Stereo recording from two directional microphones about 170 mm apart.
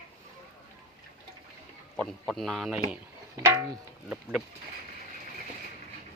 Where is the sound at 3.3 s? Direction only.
15° right (ahead or behind).